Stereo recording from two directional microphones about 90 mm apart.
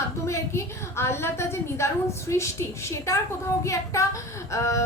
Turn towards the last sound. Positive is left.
turn(degrees=35)  # may be behind; listen again after turning